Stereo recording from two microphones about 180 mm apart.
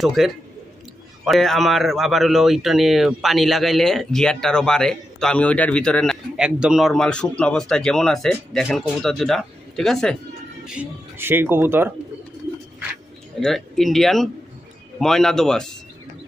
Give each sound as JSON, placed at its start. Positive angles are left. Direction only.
{"t": 0.0, "sound": "speech", "side_deg": 0}
{"t": 13.4, "sound": "speech", "side_deg": 0}